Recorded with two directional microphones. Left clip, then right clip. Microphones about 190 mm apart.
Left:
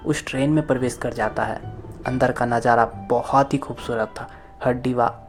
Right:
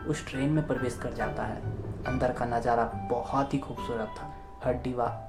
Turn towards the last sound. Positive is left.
turn(degrees=45)  # may be behind; listen again after turning